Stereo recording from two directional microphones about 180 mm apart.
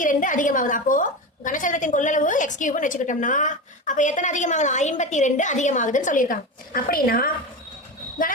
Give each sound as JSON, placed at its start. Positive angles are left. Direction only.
{"t": 0.0, "sound": "a woman's voice", "side_deg": 45}